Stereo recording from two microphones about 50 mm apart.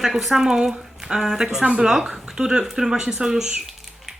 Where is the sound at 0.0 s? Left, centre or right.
Centre.